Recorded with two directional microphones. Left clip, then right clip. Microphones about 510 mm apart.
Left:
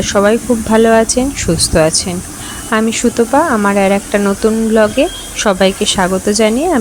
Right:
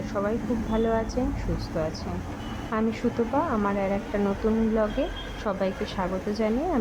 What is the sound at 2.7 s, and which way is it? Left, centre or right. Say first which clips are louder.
Speech: left 14 dB; centre.